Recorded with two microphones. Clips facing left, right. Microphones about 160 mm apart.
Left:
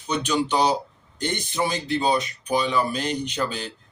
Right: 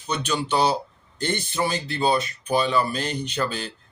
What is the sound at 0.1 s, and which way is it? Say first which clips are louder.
Speech: left 2 dB; 15° left (ahead or behind).